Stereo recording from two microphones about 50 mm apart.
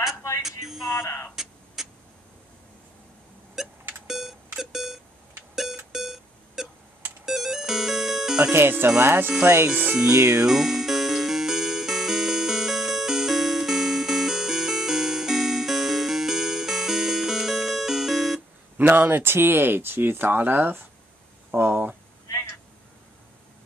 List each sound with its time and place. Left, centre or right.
0.4 s speech: centre
1.0 s speech: left
1.3 s a sound: centre
3.6 s beep: centre
7.2 s music: centre
8.5 s speech: right
9.9 s music: centre
18.8 s speech: right